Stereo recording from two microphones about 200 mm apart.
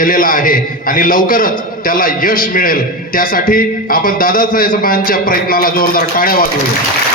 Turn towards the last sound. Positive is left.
turn(degrees=45)  # may be behind; listen again after turning